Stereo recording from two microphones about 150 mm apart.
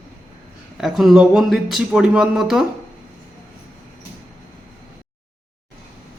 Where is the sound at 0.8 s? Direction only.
Centre (ahead or behind).